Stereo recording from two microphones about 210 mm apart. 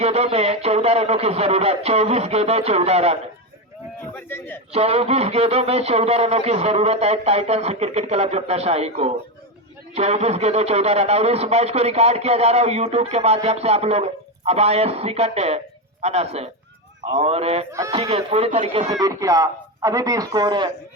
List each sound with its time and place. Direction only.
0.0 s a man's voice: 30° right (ahead or behind)
4.7 s a man's voice: 30° right (ahead or behind)
17.7 s speech: 15° right (ahead or behind)
18.1 s speech: 30° right (ahead or behind)